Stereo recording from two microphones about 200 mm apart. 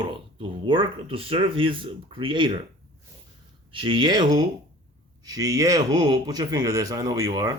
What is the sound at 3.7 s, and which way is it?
A man's voice, 25° right (ahead or behind).